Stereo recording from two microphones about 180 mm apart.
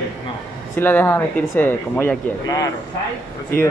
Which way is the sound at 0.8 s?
10° left (ahead or behind).